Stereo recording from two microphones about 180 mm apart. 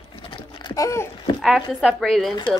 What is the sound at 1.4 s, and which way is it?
Speech, centre (ahead or behind).